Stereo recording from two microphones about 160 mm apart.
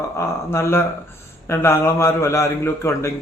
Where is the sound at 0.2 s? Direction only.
15° left (ahead or behind).